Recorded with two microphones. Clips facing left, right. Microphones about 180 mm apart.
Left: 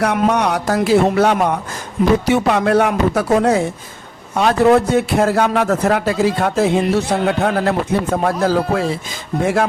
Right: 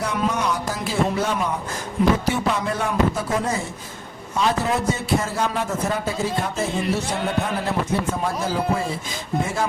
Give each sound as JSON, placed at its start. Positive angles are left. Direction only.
{"t": 0.0, "sound": "a man's voice", "side_deg": 70}